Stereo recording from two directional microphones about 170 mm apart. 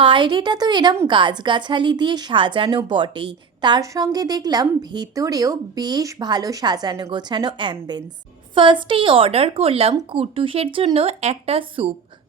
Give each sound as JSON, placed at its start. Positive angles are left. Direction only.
{"t": 0.0, "sound": "a woman's voice", "side_deg": -30}